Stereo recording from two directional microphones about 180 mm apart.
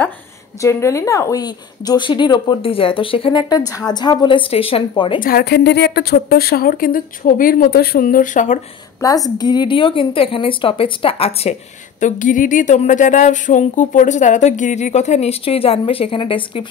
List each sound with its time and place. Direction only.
0.6 s speech: 15° left (ahead or behind)
5.2 s speech: 60° left (ahead or behind); by 8.5 s 45° left (ahead or behind)
9.0 s a woman's voice: 15° left (ahead or behind); by 11.5 s 35° left (ahead or behind)
12.0 s speech: 45° left (ahead or behind); by 16.6 s 30° left (ahead or behind)